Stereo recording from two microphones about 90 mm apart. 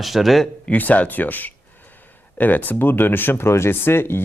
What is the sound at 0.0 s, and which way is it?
Speech, centre (ahead or behind).